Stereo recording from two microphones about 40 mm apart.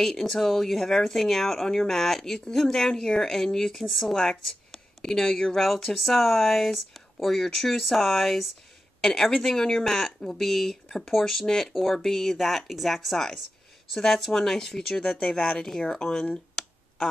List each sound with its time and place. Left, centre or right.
0.0 s speech: centre
3.7 s speech: centre
9.8 s speech: centre
15.1 s speech: left